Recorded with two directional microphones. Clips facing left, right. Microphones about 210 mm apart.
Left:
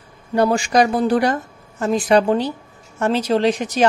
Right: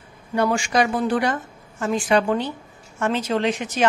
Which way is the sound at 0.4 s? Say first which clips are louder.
Left 4 dB; 40° left (ahead or behind).